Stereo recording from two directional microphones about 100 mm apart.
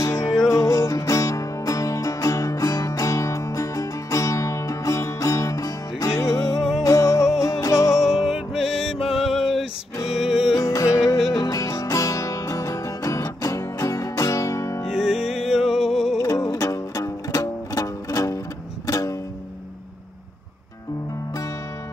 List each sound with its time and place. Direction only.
0.0 s music: 30° left (ahead or behind)
7.9 s music: 5° right (ahead or behind)
10.5 s music: 35° left (ahead or behind)
14.9 s music: 5° right (ahead or behind)
16.2 s music: 30° left (ahead or behind)